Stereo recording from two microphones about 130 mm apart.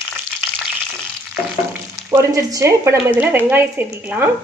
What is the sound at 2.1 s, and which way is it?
A woman's voice, 25° right (ahead or behind).